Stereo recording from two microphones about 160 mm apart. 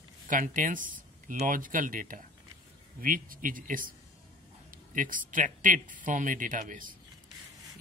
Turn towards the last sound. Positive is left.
turn(degrees=-55)  # may be behind; listen again after turning